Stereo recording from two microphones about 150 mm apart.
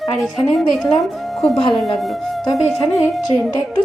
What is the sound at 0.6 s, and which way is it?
A woman's voice, 5° left (ahead or behind).